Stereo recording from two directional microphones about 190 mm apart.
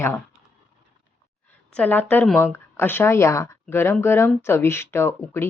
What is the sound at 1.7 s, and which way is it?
A woman's voice, 10° left (ahead or behind).